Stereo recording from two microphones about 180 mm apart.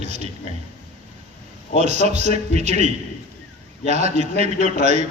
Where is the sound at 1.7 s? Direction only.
40° right (ahead or behind).